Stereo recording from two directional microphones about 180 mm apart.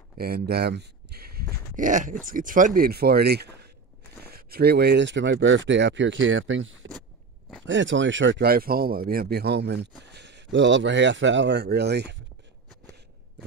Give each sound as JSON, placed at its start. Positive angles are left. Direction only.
{"t": 0.2, "sound": "speech", "side_deg": -60}